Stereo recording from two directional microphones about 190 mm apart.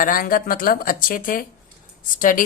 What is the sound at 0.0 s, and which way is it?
A woman's voice, 50° left (ahead or behind).